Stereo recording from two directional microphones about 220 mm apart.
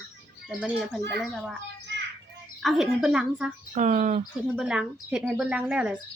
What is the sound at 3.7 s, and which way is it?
Speech, 35° right (ahead or behind).